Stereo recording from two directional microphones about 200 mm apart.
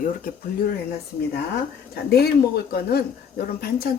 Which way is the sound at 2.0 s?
55° left (ahead or behind).